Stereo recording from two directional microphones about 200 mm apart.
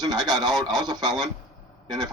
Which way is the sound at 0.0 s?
20° right (ahead or behind).